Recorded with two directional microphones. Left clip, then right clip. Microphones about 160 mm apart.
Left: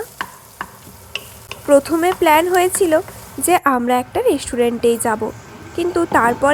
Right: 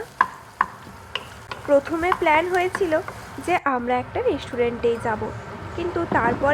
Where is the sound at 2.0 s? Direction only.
50° left (ahead or behind).